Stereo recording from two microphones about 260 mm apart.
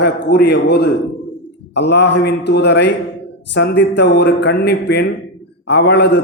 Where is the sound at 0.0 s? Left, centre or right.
Left.